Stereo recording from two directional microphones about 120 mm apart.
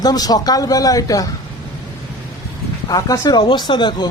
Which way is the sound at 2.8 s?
30° left (ahead or behind).